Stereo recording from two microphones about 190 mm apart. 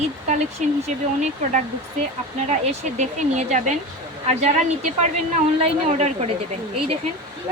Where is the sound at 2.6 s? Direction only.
35° right (ahead or behind).